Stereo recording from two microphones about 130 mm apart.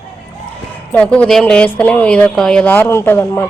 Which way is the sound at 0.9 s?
10° left (ahead or behind).